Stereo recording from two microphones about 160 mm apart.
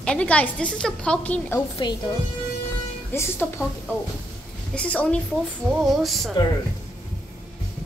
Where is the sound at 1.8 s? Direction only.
30° left (ahead or behind).